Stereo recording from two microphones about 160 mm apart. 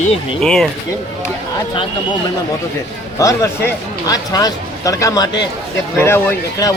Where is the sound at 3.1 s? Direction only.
20° left (ahead or behind).